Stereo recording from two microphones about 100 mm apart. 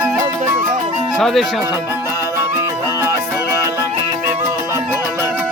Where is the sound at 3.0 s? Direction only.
30° right (ahead or behind).